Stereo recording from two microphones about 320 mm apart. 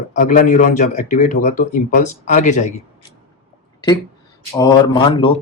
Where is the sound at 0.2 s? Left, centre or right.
Left.